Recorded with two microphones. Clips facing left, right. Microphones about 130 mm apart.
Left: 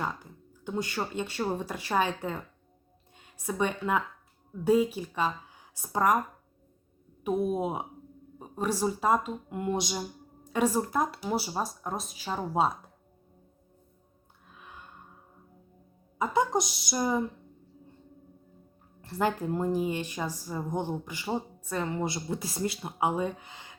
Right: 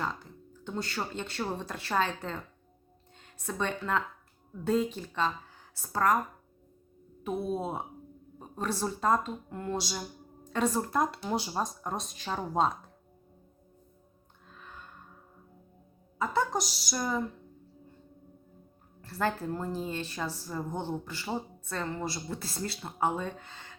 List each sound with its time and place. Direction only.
0.0 s speech: 10° left (ahead or behind)
7.3 s speech: 15° left (ahead or behind)
14.5 s music: 10° left (ahead or behind)
16.1 s speech: 15° left (ahead or behind)
19.0 s speech: 20° left (ahead or behind)